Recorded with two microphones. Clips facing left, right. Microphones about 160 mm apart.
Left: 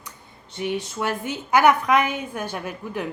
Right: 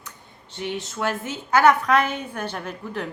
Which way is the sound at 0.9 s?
15° left (ahead or behind).